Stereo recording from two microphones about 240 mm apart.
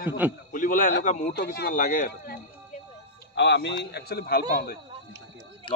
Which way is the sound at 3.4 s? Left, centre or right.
Left.